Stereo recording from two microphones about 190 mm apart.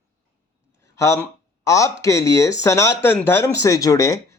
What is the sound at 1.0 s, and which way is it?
A man's voice, 15° left (ahead or behind).